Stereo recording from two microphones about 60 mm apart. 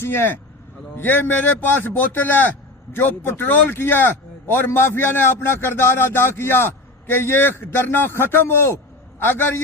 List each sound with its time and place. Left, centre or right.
0.0 s a man's voice: left